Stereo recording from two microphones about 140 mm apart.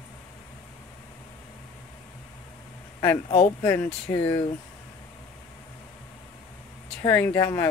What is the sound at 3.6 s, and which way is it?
Speech, 20° left (ahead or behind).